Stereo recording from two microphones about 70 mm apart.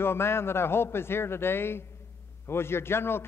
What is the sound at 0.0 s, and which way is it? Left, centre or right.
A man's voice, left.